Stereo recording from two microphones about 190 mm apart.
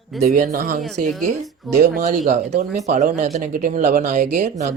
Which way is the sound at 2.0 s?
40° right (ahead or behind).